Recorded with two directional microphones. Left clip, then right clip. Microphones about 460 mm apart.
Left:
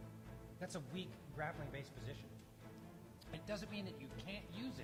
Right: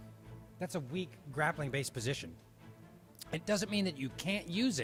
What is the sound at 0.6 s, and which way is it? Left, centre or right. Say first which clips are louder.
Speech: right 9 dB; right.